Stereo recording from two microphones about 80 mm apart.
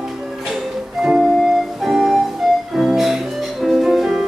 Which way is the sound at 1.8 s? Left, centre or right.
Centre.